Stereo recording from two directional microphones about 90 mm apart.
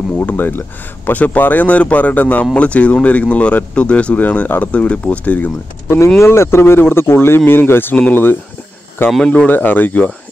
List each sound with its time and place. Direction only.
0.2 s speech: 20° left (ahead or behind)
5.9 s speech: 30° left (ahead or behind)